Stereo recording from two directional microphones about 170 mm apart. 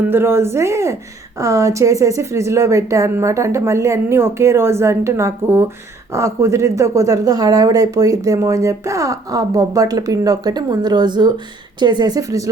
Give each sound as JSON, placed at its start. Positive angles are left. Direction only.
{"t": 0.0, "sound": "a woman's voice", "side_deg": -15}